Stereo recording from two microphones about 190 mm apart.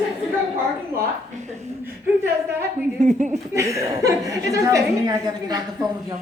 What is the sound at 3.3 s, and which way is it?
A woman's voice, 15° right (ahead or behind).